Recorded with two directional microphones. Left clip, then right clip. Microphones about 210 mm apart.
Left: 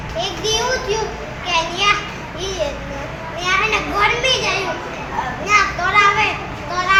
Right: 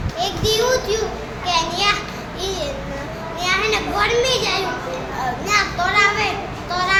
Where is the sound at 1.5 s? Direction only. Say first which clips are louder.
Left 1 dB; 20° right (ahead or behind).